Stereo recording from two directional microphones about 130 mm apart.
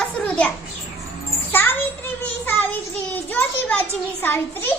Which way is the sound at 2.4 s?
15° left (ahead or behind).